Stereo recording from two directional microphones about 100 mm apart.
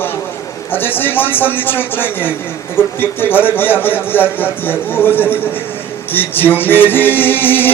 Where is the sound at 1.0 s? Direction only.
20° left (ahead or behind).